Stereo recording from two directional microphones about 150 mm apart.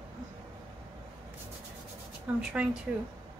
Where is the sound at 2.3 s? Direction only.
10° right (ahead or behind).